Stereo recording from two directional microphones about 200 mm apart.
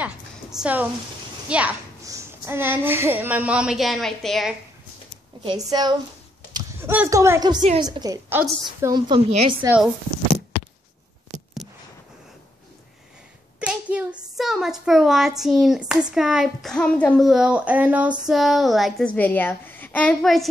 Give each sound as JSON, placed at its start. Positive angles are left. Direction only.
{"t": 0.0, "sound": "a sound", "side_deg": -5}
{"t": 1.5, "sound": "a child's voice", "side_deg": -5}
{"t": 5.4, "sound": "a woman's voice", "side_deg": -20}
{"t": 9.3, "sound": "a woman's voice", "side_deg": -30}
{"t": 13.6, "sound": "a child's voice", "side_deg": -5}